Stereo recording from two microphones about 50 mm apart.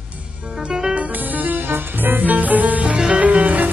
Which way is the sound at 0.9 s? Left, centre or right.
Right.